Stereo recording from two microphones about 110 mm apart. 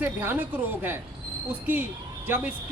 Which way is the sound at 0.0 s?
20° right (ahead or behind).